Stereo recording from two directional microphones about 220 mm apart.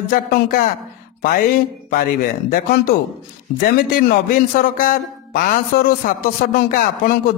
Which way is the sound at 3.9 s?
40° left (ahead or behind).